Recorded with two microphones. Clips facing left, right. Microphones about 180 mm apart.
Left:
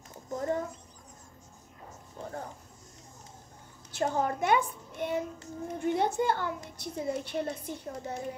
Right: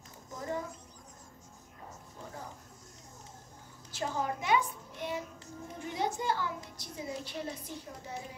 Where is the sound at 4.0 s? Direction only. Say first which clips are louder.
Left 6 dB; 55° left (ahead or behind).